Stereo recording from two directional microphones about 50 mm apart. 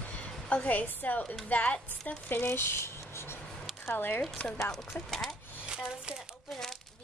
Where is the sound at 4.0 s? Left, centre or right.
Left.